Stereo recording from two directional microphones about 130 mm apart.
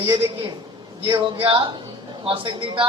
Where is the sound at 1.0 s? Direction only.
40° right (ahead or behind).